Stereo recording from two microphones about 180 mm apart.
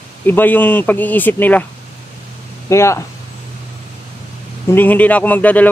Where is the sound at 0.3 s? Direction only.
10° left (ahead or behind).